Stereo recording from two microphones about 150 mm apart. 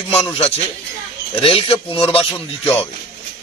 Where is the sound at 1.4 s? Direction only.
40° left (ahead or behind).